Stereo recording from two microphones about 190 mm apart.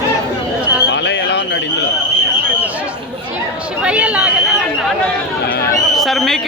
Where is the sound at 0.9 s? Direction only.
65° left (ahead or behind).